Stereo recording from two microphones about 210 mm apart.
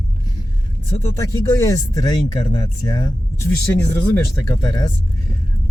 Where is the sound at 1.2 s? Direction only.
15° left (ahead or behind).